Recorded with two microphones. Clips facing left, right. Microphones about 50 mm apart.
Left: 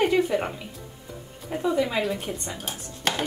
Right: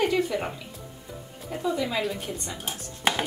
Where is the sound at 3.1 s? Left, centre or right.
Centre.